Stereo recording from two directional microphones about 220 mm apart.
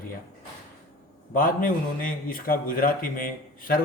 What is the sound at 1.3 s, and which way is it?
A man's voice, 40° left (ahead or behind).